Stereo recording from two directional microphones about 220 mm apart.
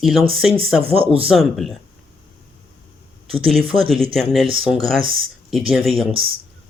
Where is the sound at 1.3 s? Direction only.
Centre (ahead or behind).